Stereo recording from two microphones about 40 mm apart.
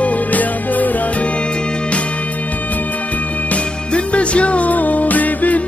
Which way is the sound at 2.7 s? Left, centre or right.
Left.